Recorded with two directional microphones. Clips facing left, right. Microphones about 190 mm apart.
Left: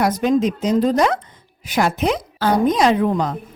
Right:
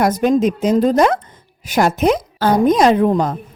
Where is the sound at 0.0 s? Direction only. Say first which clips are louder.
Right 3 dB; 50° right (ahead or behind).